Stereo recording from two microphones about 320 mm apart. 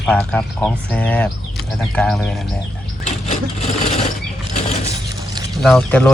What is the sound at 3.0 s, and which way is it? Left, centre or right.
Vehicle, left.